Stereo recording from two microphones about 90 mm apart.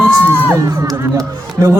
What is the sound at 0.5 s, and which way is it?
Speech, 40° right (ahead or behind).